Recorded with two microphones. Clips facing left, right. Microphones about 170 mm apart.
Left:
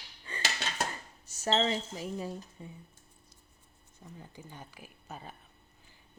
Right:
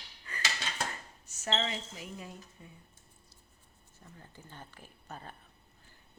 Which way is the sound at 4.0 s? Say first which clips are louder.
Left 5 dB; 15° left (ahead or behind).